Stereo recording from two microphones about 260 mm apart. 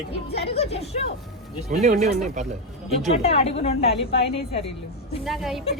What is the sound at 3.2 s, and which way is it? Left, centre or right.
A woman's voice, left.